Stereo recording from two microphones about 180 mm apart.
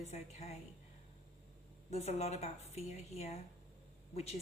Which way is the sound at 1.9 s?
35° left (ahead or behind).